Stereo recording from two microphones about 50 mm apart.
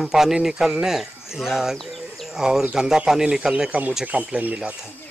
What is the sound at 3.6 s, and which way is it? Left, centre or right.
Speech, right.